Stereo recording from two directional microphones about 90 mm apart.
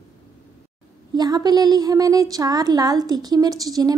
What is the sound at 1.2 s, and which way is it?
A woman's voice, 45° right (ahead or behind).